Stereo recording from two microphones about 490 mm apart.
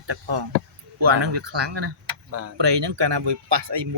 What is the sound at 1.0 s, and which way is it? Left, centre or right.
Speech, right.